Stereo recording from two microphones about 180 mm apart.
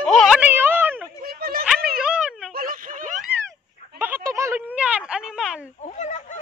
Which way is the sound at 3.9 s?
10° right (ahead or behind).